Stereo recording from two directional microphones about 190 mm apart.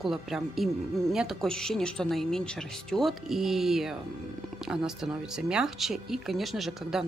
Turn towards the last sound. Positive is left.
turn(degrees=0)  # may be behind; listen again after turning